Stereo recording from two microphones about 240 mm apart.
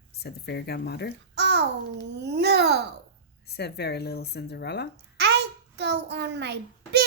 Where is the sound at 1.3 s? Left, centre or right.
Right.